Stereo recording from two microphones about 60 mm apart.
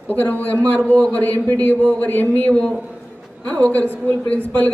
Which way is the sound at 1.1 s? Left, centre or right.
Left.